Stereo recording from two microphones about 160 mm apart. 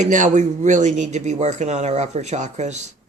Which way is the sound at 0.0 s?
50° right (ahead or behind).